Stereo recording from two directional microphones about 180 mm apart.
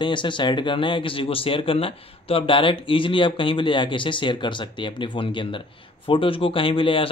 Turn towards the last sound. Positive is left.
turn(degrees=30)  # may be behind; listen again after turning